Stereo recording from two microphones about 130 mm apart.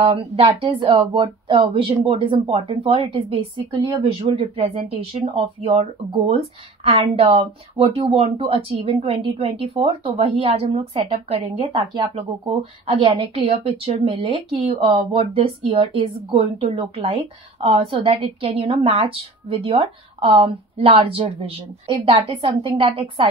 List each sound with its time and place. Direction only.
0.0 s a woman's voice: 50° right (ahead or behind)
3.7 s speech: 30° right (ahead or behind)
5.3 s a woman's voice: 50° right (ahead or behind)